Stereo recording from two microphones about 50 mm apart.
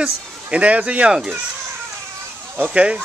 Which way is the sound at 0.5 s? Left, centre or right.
Right.